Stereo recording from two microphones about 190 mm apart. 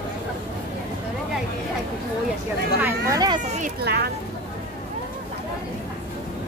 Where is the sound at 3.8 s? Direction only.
60° right (ahead or behind).